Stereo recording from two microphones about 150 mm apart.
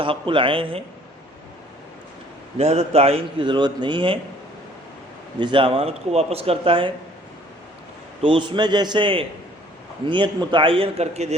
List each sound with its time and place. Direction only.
0.0 s a man's voice: 35° right (ahead or behind)
2.6 s a man's voice: 45° right (ahead or behind)
5.4 s a man's voice: 35° right (ahead or behind)
8.2 s a man's voice: 35° right (ahead or behind)